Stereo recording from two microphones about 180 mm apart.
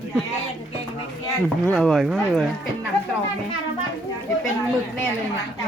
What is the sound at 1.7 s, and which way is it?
Speech, centre (ahead or behind).